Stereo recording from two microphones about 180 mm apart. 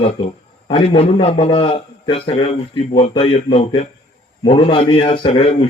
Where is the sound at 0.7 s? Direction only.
30° left (ahead or behind).